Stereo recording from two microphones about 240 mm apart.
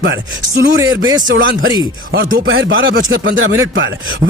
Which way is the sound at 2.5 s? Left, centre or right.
Right.